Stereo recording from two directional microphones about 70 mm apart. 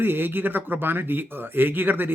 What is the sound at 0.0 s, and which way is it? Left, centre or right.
A man's voice, right.